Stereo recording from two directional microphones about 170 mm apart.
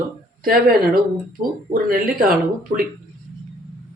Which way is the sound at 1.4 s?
55° right (ahead or behind).